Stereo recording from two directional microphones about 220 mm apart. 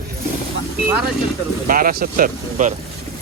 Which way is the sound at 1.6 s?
40° right (ahead or behind).